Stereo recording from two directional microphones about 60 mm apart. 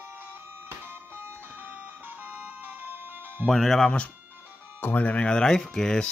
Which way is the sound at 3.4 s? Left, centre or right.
Centre.